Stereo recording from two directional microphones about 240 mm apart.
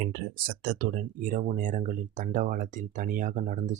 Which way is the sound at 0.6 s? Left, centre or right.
Right.